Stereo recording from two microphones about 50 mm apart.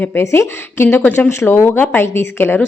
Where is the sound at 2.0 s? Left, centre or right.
Left.